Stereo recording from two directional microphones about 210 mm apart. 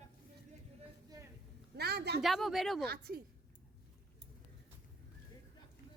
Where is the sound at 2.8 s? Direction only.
50° right (ahead or behind).